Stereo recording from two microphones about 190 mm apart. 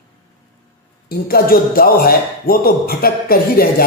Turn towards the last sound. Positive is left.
turn(degrees=50)  # may be behind; listen again after turning